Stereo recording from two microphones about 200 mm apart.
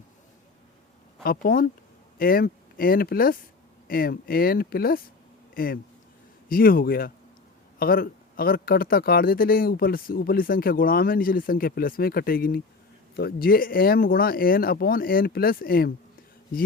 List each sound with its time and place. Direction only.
1.2 s a man's voice: 50° left (ahead or behind)